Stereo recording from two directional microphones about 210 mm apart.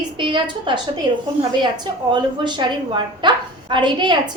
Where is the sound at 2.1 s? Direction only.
20° right (ahead or behind).